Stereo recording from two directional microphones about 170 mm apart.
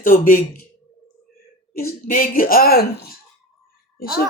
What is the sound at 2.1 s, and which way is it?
Speech, 60° left (ahead or behind).